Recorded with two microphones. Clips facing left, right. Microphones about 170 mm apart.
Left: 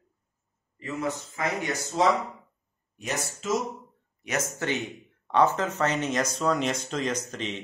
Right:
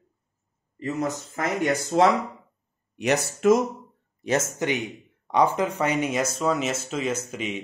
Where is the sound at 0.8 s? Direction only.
45° right (ahead or behind); by 2.1 s 60° right (ahead or behind).